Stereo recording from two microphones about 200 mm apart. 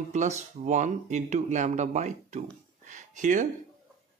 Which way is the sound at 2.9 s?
40° right (ahead or behind).